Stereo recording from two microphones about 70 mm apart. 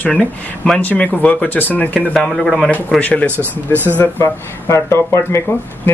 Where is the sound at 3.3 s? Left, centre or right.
Right.